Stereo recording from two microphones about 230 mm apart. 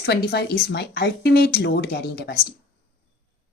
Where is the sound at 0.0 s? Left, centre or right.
Left.